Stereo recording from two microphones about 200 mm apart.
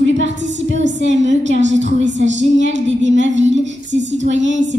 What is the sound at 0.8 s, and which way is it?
Speech, 35° right (ahead or behind).